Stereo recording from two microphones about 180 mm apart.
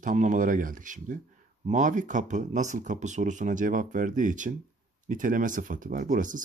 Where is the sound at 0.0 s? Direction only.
45° right (ahead or behind).